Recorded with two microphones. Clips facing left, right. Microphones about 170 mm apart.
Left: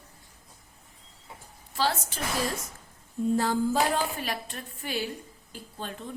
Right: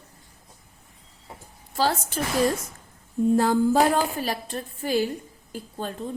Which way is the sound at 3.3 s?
50° right (ahead or behind).